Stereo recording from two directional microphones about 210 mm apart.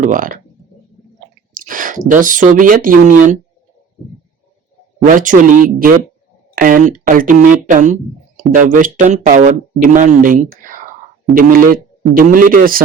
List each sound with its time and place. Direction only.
0.0 s speech: 40° right (ahead or behind)
1.5 s a sound: 40° right (ahead or behind)
2.0 s a man's voice: 40° right (ahead or behind)
5.0 s a man's voice: 40° right (ahead or behind)